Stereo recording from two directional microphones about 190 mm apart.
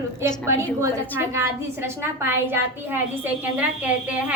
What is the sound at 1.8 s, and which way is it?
A woman's voice, 10° right (ahead or behind).